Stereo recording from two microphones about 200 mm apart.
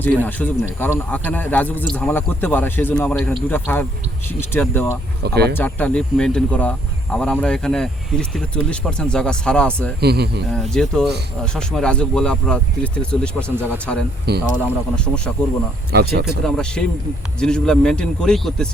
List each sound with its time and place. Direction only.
0.0 s speech: 10° left (ahead or behind)
5.2 s speech: 55° right (ahead or behind)
5.5 s speech: 10° left (ahead or behind)
10.0 s speech: 55° right (ahead or behind)
10.5 s speech: 5° left (ahead or behind)
15.9 s speech: 55° right (ahead or behind)
16.4 s speech: 5° left (ahead or behind)